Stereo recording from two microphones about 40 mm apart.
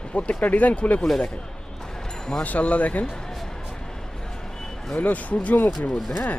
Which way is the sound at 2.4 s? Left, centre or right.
Left.